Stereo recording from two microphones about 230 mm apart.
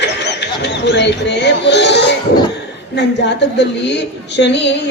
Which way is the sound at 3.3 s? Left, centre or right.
Left.